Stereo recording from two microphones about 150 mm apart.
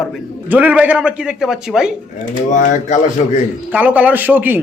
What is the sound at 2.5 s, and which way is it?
Speech, 55° left (ahead or behind).